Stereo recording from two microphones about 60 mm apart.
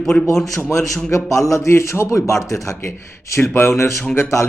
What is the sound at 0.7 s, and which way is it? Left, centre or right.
Speech, left.